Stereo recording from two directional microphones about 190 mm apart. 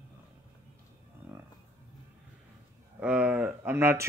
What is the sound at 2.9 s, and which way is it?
Speech, 5° right (ahead or behind).